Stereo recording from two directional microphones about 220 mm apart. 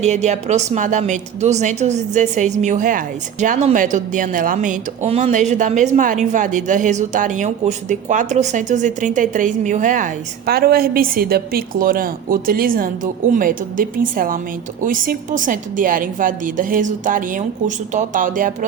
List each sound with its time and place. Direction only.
0.0 s speech: 30° right (ahead or behind)